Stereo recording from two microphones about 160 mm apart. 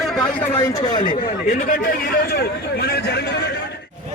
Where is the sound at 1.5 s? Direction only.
60° left (ahead or behind); by 3.2 s 85° left.